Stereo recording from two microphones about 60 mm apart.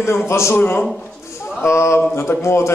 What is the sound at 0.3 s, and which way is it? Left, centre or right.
Speech, left.